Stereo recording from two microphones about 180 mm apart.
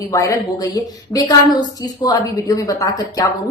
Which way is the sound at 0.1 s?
20° left (ahead or behind).